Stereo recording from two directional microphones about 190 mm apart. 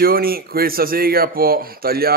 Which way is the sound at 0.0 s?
50° right (ahead or behind).